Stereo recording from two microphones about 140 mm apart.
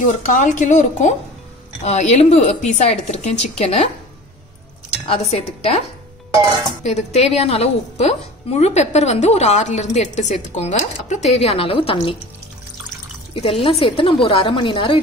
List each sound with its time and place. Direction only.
0.0 s a woman's voice: 60° left (ahead or behind)
1.9 s a woman's voice: 55° left (ahead or behind)
5.0 s a woman's voice: 45° left (ahead or behind)
6.9 s a woman's voice: 55° left (ahead or behind)
13.3 s a woman's voice: 40° left (ahead or behind)